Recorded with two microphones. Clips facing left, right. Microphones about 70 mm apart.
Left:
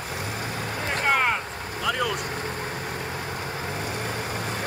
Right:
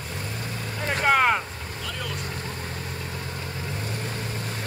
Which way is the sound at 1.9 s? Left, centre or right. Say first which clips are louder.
Left 8 dB; left.